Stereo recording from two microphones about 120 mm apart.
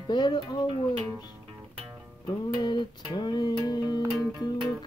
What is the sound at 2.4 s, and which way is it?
Music, 35° left (ahead or behind).